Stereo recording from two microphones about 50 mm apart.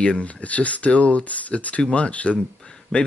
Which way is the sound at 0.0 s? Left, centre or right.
Left.